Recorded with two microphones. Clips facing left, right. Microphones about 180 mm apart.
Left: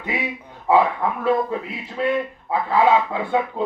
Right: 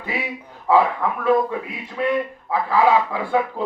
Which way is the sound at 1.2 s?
25° left (ahead or behind).